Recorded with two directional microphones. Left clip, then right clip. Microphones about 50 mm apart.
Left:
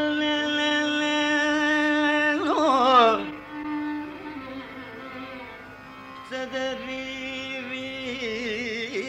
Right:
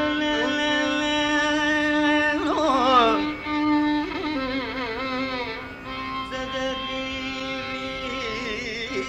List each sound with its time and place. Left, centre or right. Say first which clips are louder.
0.0 s music: right 1 dB; left
2.3 s carnatic music: even; left